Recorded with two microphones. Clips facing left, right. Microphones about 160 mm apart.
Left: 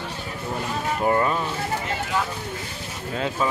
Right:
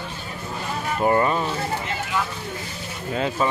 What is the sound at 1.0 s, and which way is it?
Speech, 5° right (ahead or behind).